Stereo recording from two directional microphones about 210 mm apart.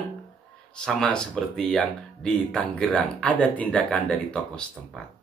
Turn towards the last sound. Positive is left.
turn(degrees=5)  # may be behind; listen again after turning